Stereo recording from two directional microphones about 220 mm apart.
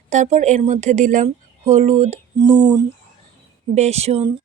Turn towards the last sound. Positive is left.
turn(degrees=-30)  # may be behind; listen again after turning